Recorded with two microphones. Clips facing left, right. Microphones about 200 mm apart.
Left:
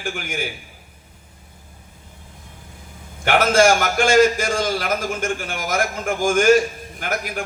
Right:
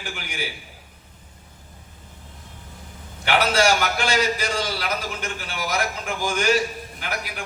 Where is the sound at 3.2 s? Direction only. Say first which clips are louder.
Left 5 dB; 45° left (ahead or behind).